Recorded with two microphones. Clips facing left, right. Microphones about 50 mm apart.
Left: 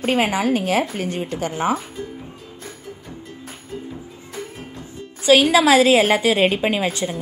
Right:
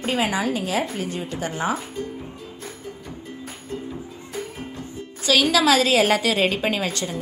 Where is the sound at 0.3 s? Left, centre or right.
Left.